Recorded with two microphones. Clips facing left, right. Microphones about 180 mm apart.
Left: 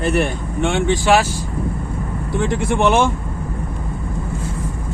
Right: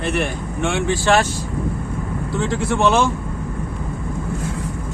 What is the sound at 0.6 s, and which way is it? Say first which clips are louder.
Speech: left 2 dB; 20° left (ahead or behind).